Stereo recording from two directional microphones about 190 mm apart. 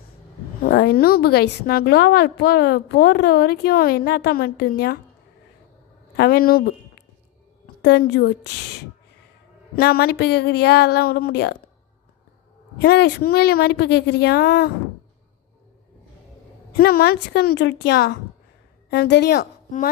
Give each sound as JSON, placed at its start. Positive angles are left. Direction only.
{"t": 0.6, "sound": "a woman's voice", "side_deg": 60}
{"t": 6.1, "sound": "a woman's voice", "side_deg": 55}
{"t": 9.7, "sound": "a woman's voice", "side_deg": 55}
{"t": 12.8, "sound": "a woman's voice", "side_deg": 60}
{"t": 16.7, "sound": "a woman's voice", "side_deg": 55}